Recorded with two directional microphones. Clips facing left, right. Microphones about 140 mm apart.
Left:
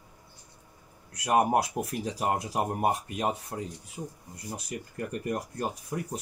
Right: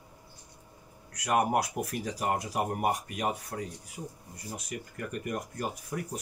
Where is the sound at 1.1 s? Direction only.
25° left (ahead or behind).